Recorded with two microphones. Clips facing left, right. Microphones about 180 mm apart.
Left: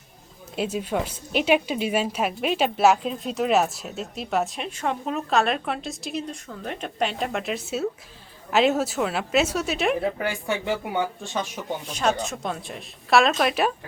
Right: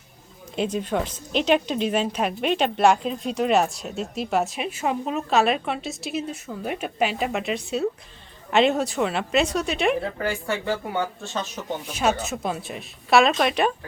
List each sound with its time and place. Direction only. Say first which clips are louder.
0.5 s a woman's voice: right 1 dB; 5° left (ahead or behind)
10.0 s speech: left 1 dB; 15° left (ahead or behind)
11.9 s a woman's voice: right 1 dB; 5° right (ahead or behind)